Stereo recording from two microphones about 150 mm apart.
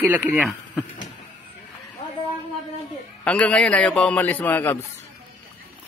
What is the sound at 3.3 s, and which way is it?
A man's voice, 10° left (ahead or behind).